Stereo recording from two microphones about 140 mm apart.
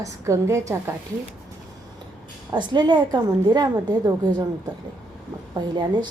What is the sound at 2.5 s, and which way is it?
A woman's voice, 35° right (ahead or behind).